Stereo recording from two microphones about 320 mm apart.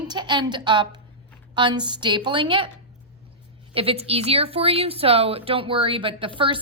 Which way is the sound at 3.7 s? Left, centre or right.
Centre.